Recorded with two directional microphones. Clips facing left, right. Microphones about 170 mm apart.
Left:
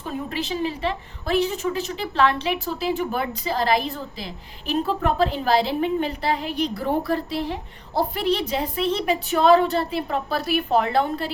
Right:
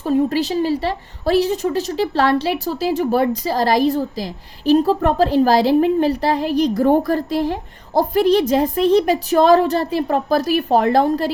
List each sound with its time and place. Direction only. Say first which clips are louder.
0.0 s a woman's voice: right 11 dB; 35° right (ahead or behind)